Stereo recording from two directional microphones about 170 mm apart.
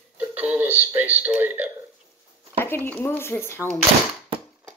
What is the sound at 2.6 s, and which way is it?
A woman's voice, 10° left (ahead or behind).